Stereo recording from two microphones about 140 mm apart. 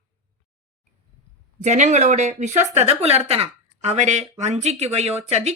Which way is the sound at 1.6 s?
55° right (ahead or behind).